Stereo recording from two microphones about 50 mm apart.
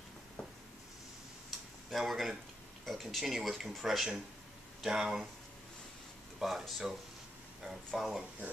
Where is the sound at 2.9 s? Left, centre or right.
Centre.